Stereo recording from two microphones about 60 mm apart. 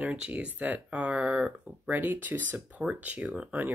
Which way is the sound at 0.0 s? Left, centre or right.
Right.